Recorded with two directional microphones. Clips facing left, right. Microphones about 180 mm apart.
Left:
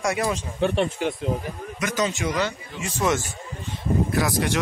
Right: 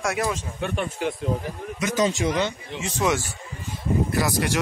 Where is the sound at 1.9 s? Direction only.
30° right (ahead or behind).